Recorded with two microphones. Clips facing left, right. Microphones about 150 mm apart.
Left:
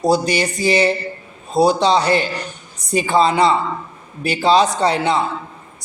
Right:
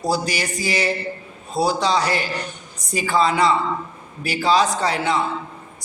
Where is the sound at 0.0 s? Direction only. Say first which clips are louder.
Left 6 dB; 25° left (ahead or behind).